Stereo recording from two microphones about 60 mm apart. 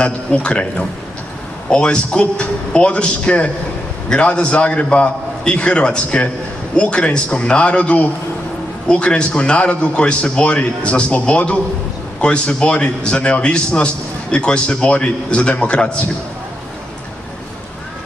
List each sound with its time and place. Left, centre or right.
0.0 s a man's voice: centre